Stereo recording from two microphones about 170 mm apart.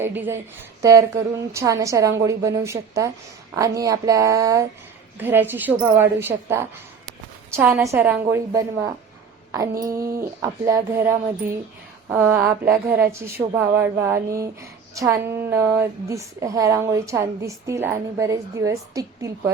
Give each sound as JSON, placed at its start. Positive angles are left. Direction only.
{"t": 0.0, "sound": "speech", "side_deg": -10}